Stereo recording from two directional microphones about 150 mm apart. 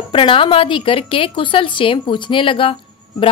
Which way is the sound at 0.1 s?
35° left (ahead or behind).